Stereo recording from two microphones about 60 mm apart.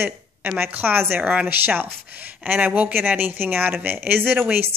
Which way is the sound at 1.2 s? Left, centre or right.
Right.